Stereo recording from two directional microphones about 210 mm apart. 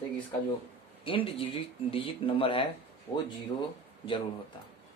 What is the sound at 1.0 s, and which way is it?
Speech, 25° left (ahead or behind).